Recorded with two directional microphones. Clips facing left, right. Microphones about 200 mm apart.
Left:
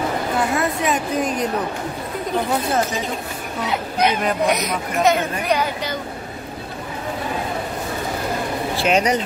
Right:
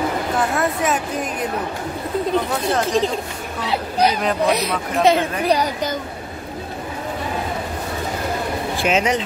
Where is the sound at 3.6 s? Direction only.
35° right (ahead or behind).